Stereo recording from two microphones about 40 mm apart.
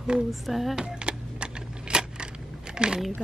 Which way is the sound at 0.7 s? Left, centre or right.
Right.